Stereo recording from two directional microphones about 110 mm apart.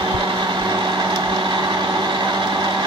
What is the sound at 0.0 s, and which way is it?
Vehicle, 40° right (ahead or behind).